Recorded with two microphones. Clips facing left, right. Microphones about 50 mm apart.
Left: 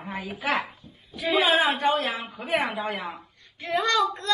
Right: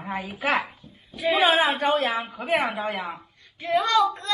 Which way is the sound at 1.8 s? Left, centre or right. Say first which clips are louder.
Right 2 dB; right.